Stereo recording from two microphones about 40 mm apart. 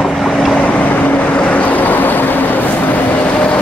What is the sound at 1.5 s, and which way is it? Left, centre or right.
Vehicle, left.